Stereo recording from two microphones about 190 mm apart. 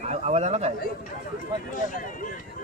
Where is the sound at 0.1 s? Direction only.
35° right (ahead or behind).